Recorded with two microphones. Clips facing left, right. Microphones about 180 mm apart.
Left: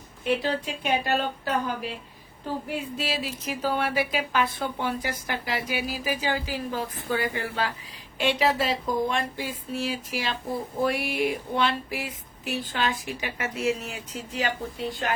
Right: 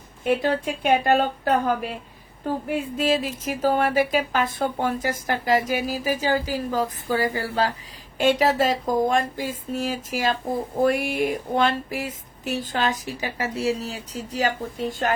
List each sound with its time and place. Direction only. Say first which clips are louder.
0.3 s speech: right 4 dB; 50° right (ahead or behind)